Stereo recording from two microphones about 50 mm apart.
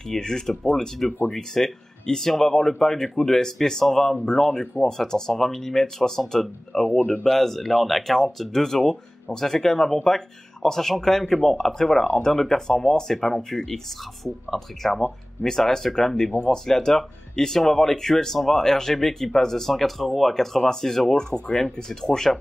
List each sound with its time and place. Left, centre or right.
0.1 s speech: centre